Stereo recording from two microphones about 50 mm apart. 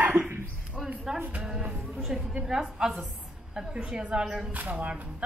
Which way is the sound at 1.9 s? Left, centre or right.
Centre.